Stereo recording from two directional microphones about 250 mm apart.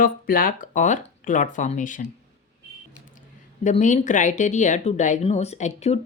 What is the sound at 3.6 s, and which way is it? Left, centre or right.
A woman's voice, left.